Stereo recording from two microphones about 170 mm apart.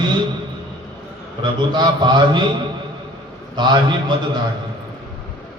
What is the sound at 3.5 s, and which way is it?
Speech, 25° right (ahead or behind).